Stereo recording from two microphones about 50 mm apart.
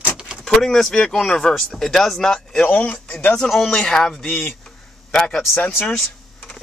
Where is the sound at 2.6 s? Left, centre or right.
Left.